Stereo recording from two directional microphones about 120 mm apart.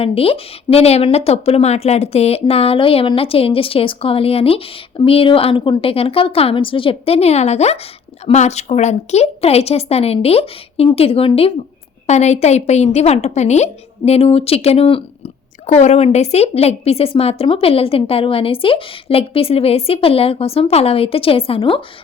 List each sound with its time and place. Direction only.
0.0 s a woman's voice: 50° left (ahead or behind)
12.0 s a woman's voice: 70° left (ahead or behind); by 15.3 s 50° left (ahead or behind)
15.6 s a woman's voice: 70° left (ahead or behind); by 21.8 s 50° left (ahead or behind)